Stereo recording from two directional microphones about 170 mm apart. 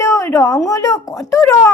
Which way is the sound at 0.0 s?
15° left (ahead or behind).